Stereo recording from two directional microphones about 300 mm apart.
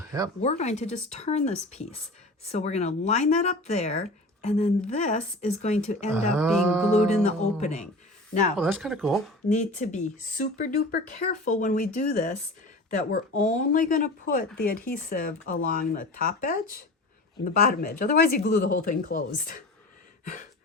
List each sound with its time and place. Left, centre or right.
0.4 s speech: left
6.1 s music: centre
6.9 s speech: left
8.5 s music: centre
9.5 s speech: left